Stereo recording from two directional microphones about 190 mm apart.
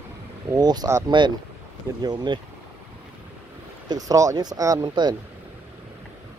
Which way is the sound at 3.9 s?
20° right (ahead or behind).